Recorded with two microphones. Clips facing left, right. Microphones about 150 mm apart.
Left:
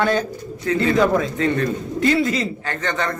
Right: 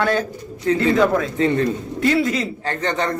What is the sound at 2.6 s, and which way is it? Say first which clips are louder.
Speech: right 2 dB; 30° right (ahead or behind).